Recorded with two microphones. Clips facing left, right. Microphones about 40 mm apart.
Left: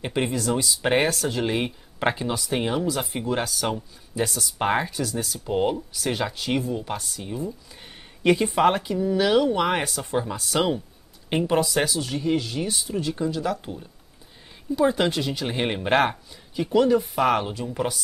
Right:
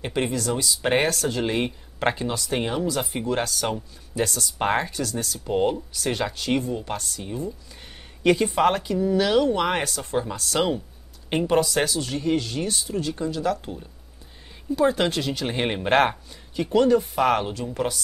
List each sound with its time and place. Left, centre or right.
0.0 s speech: centre
15.4 s speech: centre